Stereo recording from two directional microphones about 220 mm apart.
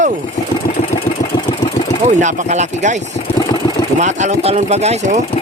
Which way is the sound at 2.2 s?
30° right (ahead or behind).